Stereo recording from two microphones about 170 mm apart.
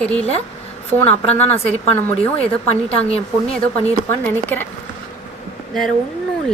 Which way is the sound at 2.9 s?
35° left (ahead or behind).